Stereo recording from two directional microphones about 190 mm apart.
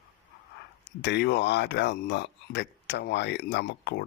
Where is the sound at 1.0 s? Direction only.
65° left (ahead or behind).